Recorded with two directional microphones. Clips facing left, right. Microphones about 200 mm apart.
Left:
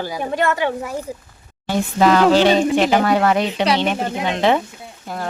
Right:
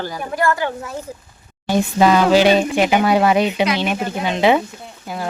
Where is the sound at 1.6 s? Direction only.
15° right (ahead or behind).